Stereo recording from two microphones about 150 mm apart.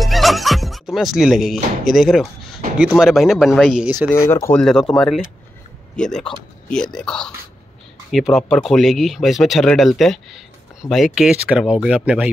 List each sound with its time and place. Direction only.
0.0 s music: centre (ahead or behind)
2.8 s speech: centre (ahead or behind)
4.1 s speech: 20° left (ahead or behind)
4.6 s speech: 5° left (ahead or behind)